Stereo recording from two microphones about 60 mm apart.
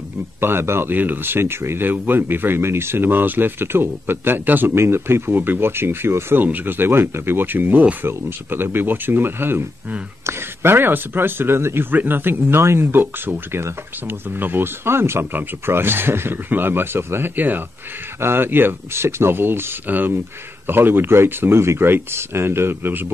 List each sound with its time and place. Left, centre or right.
0.4 s speech: right
6.4 s speech: right